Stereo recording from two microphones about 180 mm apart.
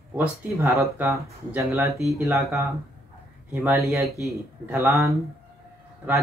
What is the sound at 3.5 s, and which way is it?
Speech, 10° right (ahead or behind).